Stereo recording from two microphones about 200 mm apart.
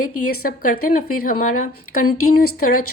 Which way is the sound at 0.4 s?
45° left (ahead or behind).